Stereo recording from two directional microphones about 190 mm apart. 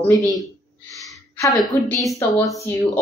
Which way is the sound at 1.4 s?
20° left (ahead or behind).